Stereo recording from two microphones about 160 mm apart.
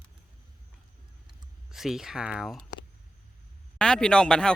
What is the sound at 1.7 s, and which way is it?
Speech, centre (ahead or behind).